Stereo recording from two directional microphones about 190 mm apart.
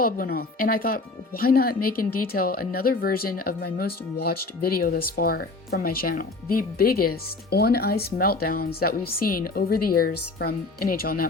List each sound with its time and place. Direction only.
0.0 s speech: 50° left (ahead or behind)